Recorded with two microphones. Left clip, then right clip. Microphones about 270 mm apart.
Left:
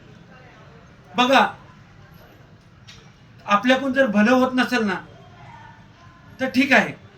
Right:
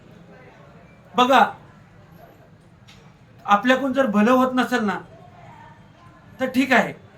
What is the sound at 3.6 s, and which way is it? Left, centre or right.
A man's voice, centre.